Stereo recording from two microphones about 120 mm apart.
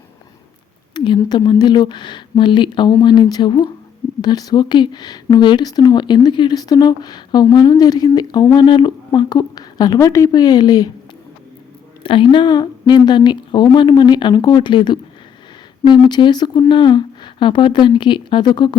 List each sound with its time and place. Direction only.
0.9 s speech: 40° left (ahead or behind)
12.0 s speech: 45° left (ahead or behind)